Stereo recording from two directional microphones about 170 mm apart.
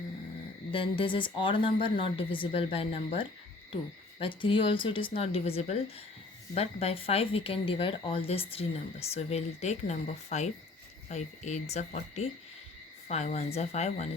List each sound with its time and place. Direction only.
0.7 s speech: 30° left (ahead or behind)